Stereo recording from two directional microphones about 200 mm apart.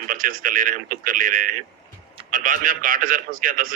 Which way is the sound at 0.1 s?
40° right (ahead or behind).